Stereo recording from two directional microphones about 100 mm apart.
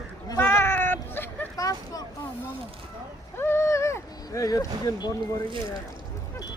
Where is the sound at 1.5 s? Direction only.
40° left (ahead or behind).